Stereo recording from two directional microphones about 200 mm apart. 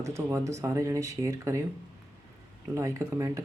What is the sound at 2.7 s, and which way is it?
Speech, 15° right (ahead or behind).